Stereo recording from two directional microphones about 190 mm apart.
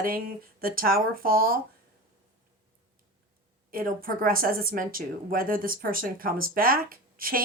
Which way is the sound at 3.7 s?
50° right (ahead or behind).